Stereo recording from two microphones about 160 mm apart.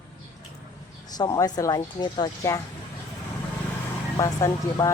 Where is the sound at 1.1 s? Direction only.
25° left (ahead or behind).